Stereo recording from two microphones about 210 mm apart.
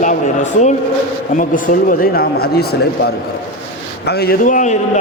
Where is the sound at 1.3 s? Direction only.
40° left (ahead or behind).